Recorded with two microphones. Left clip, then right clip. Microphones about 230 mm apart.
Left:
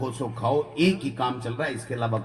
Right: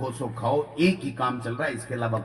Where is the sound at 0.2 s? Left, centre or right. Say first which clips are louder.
Left 1 dB; left.